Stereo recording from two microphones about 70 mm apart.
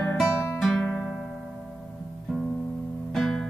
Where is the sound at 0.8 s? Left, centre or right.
Centre.